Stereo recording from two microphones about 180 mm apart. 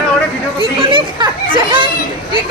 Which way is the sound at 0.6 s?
30° right (ahead or behind).